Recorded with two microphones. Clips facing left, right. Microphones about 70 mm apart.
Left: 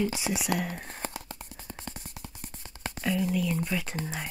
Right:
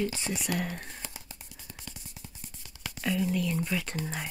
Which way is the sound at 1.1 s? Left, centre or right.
Left.